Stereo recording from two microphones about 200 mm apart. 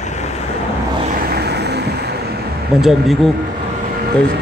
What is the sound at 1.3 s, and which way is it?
Vehicle, 55° right (ahead or behind).